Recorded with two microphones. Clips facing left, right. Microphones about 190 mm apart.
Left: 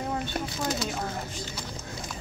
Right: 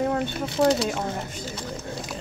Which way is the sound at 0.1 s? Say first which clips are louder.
Right 5 dB; 70° right (ahead or behind).